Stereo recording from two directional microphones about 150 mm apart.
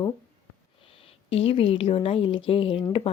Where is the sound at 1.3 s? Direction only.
40° left (ahead or behind).